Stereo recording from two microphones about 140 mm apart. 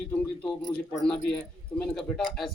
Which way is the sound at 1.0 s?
5° left (ahead or behind).